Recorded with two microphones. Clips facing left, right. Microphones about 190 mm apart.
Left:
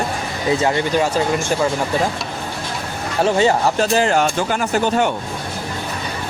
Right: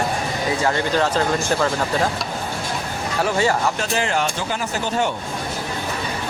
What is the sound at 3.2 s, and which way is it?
Speech, 20° left (ahead or behind).